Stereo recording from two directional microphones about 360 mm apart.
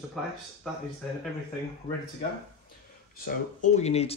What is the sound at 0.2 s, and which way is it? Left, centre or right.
Speech, centre.